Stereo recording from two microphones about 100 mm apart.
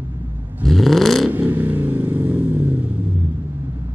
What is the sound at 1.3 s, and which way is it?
Vehicle, 15° right (ahead or behind).